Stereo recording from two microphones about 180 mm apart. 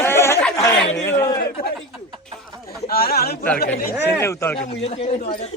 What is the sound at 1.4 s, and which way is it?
Speech, 55° left (ahead or behind).